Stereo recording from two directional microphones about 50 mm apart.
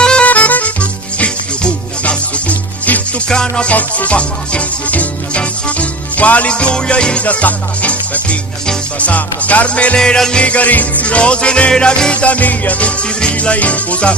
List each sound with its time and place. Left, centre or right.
0.0 s music: centre
0.3 s music: left
3.2 s music: centre
10.0 s music: centre
10.4 s music: left